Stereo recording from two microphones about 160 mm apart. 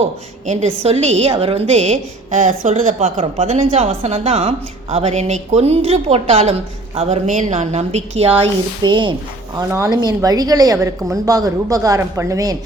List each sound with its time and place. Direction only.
0.4 s a woman's voice: 45° right (ahead or behind)
8.8 s a woman's voice: 30° right (ahead or behind)